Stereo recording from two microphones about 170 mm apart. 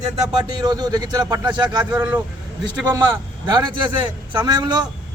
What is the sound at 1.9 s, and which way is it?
Speech, 10° right (ahead or behind).